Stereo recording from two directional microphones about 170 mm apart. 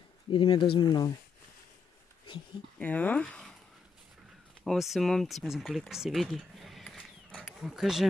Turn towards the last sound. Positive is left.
turn(degrees=-5)  # may be behind; listen again after turning